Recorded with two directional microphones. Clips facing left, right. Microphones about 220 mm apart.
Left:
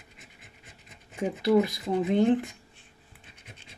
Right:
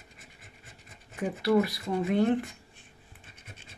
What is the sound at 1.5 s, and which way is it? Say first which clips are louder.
Speech: left 2 dB; 20° left (ahead or behind).